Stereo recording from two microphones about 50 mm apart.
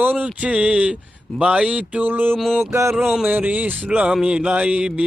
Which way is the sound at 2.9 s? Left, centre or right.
Centre.